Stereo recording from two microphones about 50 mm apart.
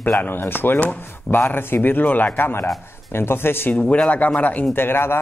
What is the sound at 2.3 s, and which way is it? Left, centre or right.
Speech, left.